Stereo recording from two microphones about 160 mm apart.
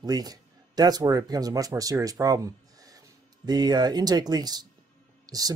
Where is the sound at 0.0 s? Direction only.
25° right (ahead or behind).